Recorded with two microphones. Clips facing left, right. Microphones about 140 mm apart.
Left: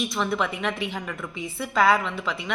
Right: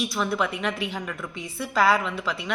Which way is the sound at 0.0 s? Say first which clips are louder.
Even; centre (ahead or behind).